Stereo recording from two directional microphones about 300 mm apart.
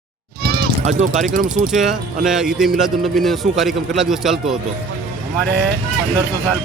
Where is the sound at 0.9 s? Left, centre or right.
Right.